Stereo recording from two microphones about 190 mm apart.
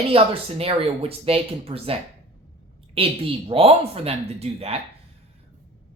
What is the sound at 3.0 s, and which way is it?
Speech, 30° right (ahead or behind).